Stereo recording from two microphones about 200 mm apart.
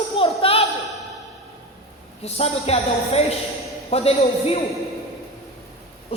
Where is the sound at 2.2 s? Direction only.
30° left (ahead or behind).